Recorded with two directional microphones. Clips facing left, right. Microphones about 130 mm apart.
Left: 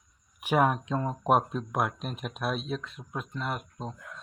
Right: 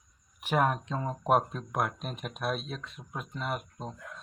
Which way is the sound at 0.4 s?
5° left (ahead or behind).